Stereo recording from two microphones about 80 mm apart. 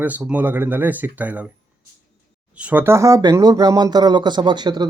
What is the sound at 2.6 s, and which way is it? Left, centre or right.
Speech, centre.